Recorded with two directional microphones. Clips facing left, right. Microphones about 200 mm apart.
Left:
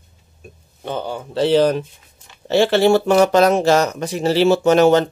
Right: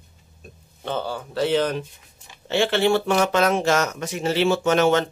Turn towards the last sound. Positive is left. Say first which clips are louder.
# left 6 dB
turn(degrees=35)  # may be behind; listen again after turning